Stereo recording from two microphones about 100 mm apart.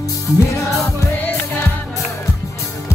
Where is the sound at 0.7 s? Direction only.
30° left (ahead or behind).